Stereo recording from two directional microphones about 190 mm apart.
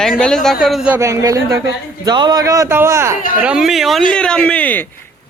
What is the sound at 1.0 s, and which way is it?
Speech, 15° right (ahead or behind).